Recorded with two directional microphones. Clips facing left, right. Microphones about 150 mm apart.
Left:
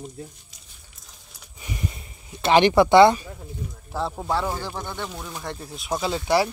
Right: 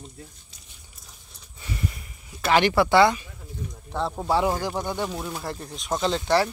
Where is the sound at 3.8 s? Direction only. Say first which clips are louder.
Even; centre (ahead or behind).